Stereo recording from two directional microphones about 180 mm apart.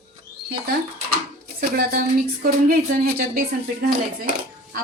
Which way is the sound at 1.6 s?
55° right (ahead or behind).